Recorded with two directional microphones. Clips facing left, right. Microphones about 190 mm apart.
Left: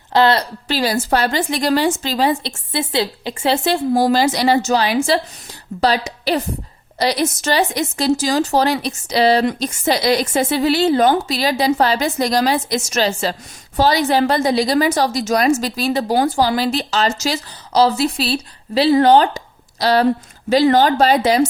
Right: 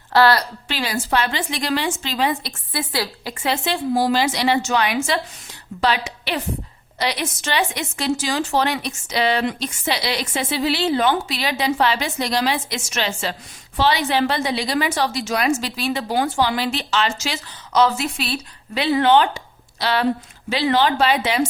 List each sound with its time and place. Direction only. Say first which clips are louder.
0.1 s speech: left 1 dB; 20° left (ahead or behind)
0.7 s speech: left 5 dB; 40° left (ahead or behind)